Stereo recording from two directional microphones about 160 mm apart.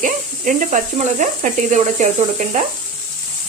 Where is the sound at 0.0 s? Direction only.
50° right (ahead or behind).